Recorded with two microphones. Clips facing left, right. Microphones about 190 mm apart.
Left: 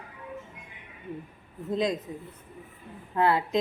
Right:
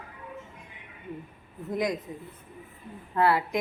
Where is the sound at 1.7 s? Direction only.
25° left (ahead or behind).